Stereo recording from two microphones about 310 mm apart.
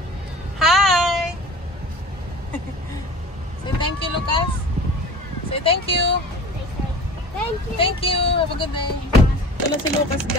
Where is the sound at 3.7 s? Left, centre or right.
Centre.